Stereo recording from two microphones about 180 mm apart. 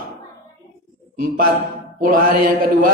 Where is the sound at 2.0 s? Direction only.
50° right (ahead or behind).